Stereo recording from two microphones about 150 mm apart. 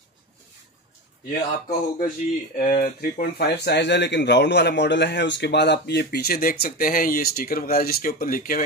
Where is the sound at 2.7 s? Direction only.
70° left (ahead or behind); by 3.8 s 90° left.